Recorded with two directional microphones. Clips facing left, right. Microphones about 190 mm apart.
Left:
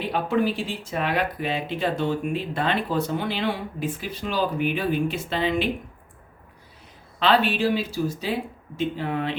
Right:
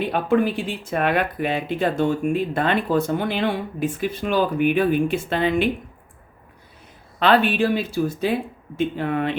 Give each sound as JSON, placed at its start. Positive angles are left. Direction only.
{"t": 0.1, "sound": "speech", "side_deg": -55}
{"t": 7.2, "sound": "speech", "side_deg": -55}